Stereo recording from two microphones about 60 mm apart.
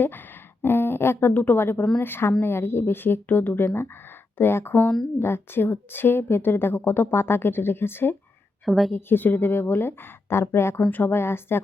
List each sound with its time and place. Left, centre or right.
0.6 s a woman's voice: left
8.6 s speech: centre
9.0 s a woman's voice: left
10.8 s a woman's voice: left
11.1 s a woman's voice: left